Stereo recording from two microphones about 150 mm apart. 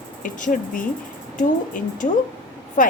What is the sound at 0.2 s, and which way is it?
A woman's voice, 60° left (ahead or behind).